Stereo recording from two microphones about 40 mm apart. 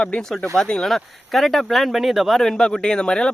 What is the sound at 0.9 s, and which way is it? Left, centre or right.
Speech, centre.